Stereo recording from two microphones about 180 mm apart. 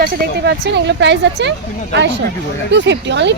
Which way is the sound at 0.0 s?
75° right (ahead or behind).